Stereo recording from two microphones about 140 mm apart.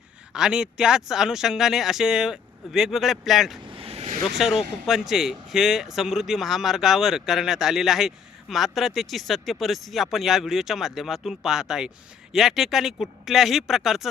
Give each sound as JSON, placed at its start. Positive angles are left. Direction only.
{"t": 0.3, "sound": "speech", "side_deg": -5}
{"t": 3.7, "sound": "vehicle", "side_deg": -40}
{"t": 4.4, "sound": "speech", "side_deg": 0}